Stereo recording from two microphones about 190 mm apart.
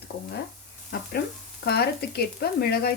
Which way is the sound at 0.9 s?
55° left (ahead or behind).